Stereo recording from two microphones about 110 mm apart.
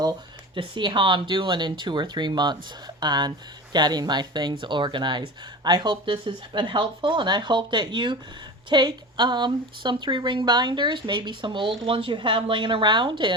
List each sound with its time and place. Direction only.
0.5 s speech: 50° right (ahead or behind)